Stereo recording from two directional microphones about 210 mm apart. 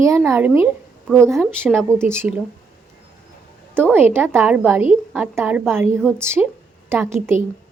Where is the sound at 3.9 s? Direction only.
10° right (ahead or behind).